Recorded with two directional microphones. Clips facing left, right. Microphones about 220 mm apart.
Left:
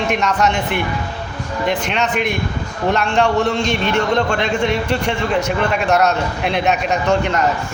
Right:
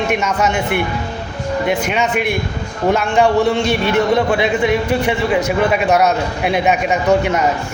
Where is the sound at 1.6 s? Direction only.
10° right (ahead or behind).